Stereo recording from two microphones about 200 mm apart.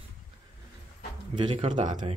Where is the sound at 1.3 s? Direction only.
25° right (ahead or behind).